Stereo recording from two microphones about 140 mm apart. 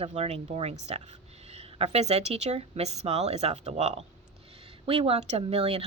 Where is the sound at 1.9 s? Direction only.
50° right (ahead or behind).